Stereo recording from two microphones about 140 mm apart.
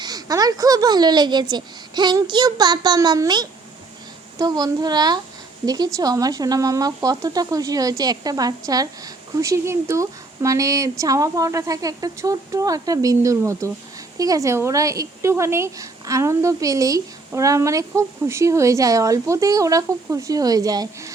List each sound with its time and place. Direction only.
0.0 s speech: 25° right (ahead or behind)